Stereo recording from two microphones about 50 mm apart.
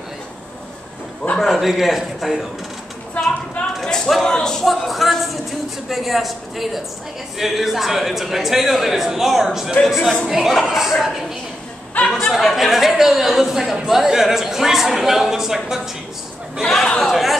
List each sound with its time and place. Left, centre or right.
1.4 s a man's voice: centre
3.8 s speech: centre
4.6 s a man's voice: centre
9.8 s a man's voice: centre
12.0 s a sound: left
12.3 s a man's voice: centre
16.6 s a man's voice: centre